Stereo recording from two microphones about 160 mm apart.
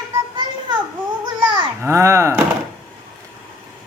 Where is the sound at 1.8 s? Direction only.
15° right (ahead or behind).